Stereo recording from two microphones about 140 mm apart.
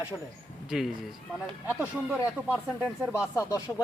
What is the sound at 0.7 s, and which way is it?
Speech, 5° right (ahead or behind).